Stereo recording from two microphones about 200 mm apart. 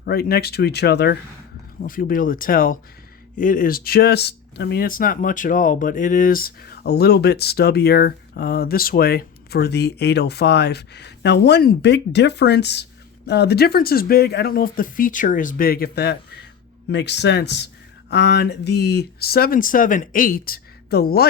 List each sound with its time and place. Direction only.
0.0 s speech: 50° left (ahead or behind)
1.8 s speech: 45° left (ahead or behind)